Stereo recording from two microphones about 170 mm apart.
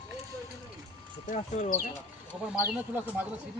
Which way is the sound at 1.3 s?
45° left (ahead or behind).